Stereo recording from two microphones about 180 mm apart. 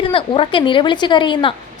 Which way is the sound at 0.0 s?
30° left (ahead or behind).